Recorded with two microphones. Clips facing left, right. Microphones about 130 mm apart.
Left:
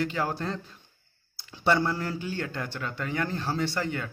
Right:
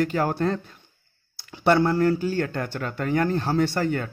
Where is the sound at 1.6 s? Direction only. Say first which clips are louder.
Right 6 dB; 55° right (ahead or behind).